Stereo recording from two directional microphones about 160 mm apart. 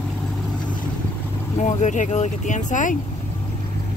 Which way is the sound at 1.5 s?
45° left (ahead or behind).